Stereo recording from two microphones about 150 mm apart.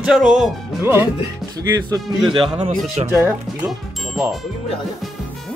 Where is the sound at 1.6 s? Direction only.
25° right (ahead or behind).